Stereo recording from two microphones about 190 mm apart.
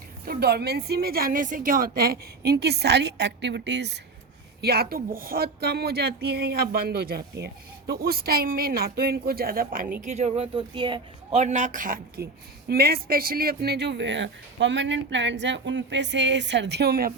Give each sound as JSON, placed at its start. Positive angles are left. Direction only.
{"t": 0.3, "sound": "a woman's voice", "side_deg": -55}
{"t": 10.0, "sound": "speech", "side_deg": -35}